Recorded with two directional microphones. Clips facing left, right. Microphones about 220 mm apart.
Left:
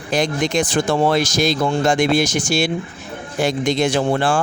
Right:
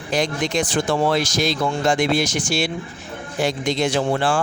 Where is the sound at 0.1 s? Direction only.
45° left (ahead or behind).